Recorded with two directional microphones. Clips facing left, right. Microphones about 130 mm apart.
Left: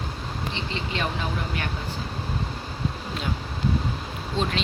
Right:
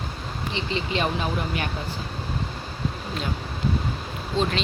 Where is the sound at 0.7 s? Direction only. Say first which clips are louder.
Right 5 dB; 20° right (ahead or behind).